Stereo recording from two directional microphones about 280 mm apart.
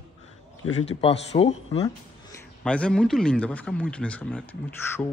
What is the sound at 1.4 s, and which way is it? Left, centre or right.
Speech, left.